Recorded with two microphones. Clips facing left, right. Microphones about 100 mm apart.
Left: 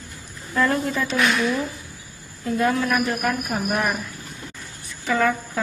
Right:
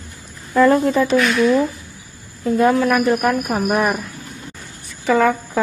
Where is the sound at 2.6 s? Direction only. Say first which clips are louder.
Right 6 dB; 35° right (ahead or behind).